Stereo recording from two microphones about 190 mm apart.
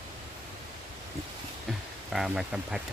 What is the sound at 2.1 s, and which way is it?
Speech, centre (ahead or behind).